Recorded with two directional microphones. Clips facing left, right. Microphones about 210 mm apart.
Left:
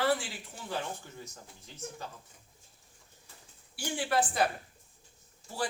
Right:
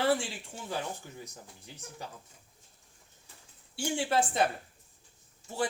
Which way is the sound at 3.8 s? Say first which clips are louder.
Right 2 dB; 25° right (ahead or behind).